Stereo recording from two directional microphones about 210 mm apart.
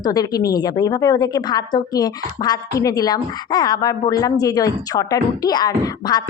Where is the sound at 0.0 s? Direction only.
20° left (ahead or behind).